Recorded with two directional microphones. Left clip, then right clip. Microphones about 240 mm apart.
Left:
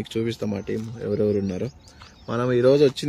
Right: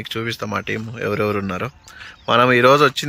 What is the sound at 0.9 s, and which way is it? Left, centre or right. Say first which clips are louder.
Speech: right 2 dB; right.